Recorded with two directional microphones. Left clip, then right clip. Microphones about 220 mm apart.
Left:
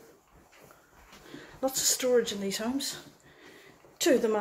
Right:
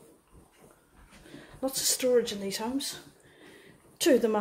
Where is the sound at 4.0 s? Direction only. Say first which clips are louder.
Right 1 dB; 10° right (ahead or behind).